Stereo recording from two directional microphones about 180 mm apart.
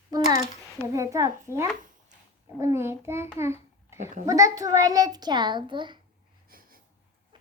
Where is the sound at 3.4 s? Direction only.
15° right (ahead or behind).